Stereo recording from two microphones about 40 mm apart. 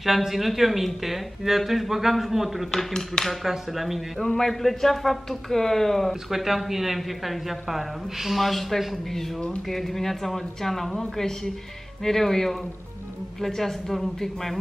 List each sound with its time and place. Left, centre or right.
0.0 s speech: centre
2.9 s speech: centre
3.3 s speech: centre
4.2 s speech: centre
6.3 s speech: centre